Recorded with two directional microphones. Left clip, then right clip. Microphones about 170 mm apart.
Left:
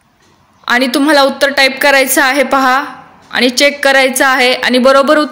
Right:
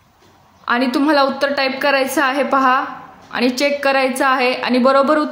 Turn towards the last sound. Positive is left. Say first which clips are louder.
# left 6 dB
turn(degrees=15)  # may be behind; listen again after turning